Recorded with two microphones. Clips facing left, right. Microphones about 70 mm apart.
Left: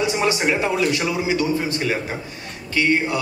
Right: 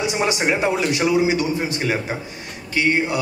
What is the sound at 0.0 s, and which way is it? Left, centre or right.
A man's voice, centre.